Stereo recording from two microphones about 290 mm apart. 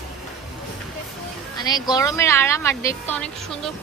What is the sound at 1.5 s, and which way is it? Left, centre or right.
A woman's voice, centre.